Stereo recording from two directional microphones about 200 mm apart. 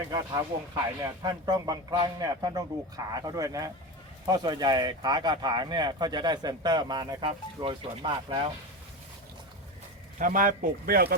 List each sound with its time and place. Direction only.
0.1 s a man's voice: 15° right (ahead or behind)
10.2 s speech: 45° right (ahead or behind)